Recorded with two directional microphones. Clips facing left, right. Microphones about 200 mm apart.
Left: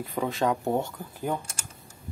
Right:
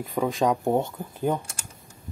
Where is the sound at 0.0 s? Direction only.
15° right (ahead or behind).